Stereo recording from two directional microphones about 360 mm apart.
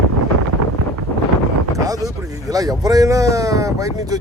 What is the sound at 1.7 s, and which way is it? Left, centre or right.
Speech, centre.